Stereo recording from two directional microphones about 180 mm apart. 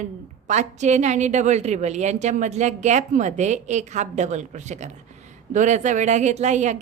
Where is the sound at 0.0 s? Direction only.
40° right (ahead or behind).